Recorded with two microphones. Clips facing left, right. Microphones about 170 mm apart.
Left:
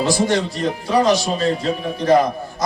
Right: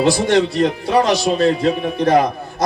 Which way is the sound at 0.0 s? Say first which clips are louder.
Right 4 dB; 60° right (ahead or behind).